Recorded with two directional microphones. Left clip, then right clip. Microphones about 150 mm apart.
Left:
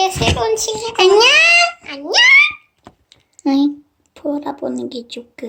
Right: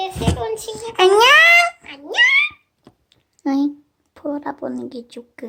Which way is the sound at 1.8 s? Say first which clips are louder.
Left 4 dB; 20° left (ahead or behind).